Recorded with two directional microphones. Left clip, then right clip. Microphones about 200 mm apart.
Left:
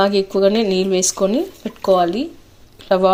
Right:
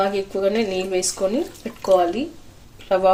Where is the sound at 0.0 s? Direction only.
40° left (ahead or behind).